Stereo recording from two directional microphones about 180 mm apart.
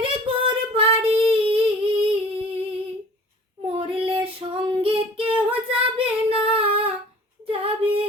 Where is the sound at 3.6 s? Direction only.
30° right (ahead or behind).